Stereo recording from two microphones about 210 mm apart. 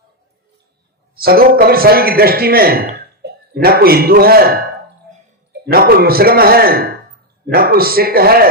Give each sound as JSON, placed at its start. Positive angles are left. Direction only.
{"t": 1.1, "sound": "a man's voice", "side_deg": -45}
{"t": 5.7, "sound": "a man's voice", "side_deg": -45}